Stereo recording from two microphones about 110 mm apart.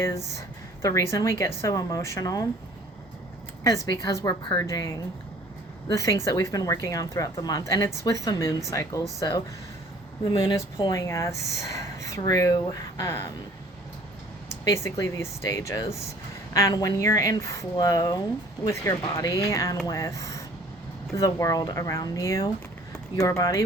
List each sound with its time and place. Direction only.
0.8 s a woman's voice: 30° left (ahead or behind)
3.6 s speech: 30° left (ahead or behind)
10.3 s speech: 40° left (ahead or behind)
11.0 s a woman's voice: 30° left (ahead or behind)
14.5 s a woman's voice: 30° left (ahead or behind)